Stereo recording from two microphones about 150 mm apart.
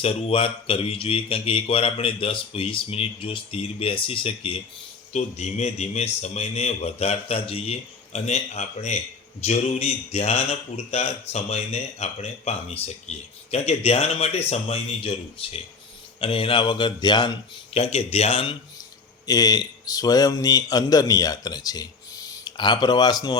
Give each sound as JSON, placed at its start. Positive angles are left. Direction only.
{"t": 0.0, "sound": "speech", "side_deg": 40}
{"t": 5.1, "sound": "speech", "side_deg": 45}
{"t": 17.7, "sound": "speech", "side_deg": 45}
{"t": 19.2, "sound": "a man's voice", "side_deg": 25}